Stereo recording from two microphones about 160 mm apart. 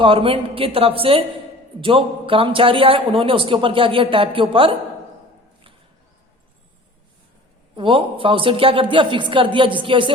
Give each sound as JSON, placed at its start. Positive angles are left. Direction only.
{"t": 0.0, "sound": "a man's voice", "side_deg": -35}
{"t": 7.8, "sound": "a man's voice", "side_deg": -30}